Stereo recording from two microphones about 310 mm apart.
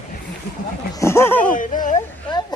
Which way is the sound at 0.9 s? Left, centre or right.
Centre.